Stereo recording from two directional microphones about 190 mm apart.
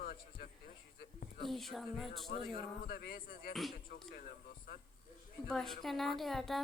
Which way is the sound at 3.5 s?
Centre (ahead or behind).